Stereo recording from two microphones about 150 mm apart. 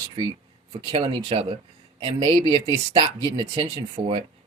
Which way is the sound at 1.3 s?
40° right (ahead or behind).